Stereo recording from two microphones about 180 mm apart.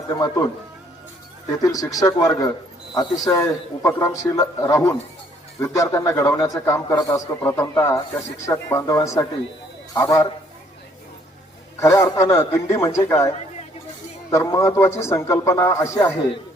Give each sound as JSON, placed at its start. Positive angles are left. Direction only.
{"t": 1.6, "sound": "a man's voice", "side_deg": 20}
{"t": 11.8, "sound": "a man's voice", "side_deg": 15}